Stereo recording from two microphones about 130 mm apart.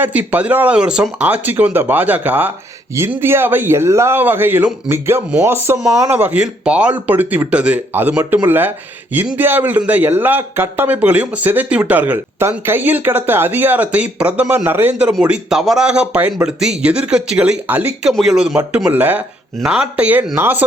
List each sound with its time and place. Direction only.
0.0 s a man's voice: 10° right (ahead or behind)
18.1 s a man's voice: centre (ahead or behind)